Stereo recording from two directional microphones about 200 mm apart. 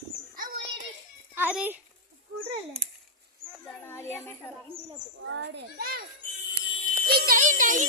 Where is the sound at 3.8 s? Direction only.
10° left (ahead or behind).